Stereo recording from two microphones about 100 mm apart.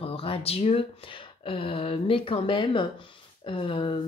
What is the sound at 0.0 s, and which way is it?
Speech, 70° left (ahead or behind).